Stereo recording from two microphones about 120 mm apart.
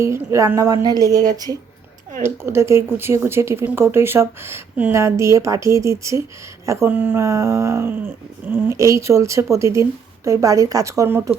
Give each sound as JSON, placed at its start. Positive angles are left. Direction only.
{"t": 0.0, "sound": "speech", "side_deg": -25}